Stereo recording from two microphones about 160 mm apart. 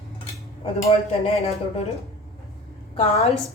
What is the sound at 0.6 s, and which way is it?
Speech, 35° left (ahead or behind).